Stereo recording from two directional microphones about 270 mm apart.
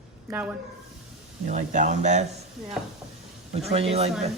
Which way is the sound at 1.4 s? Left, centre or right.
Right.